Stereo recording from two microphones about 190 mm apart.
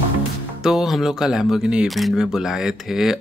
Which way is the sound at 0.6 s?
5° right (ahead or behind).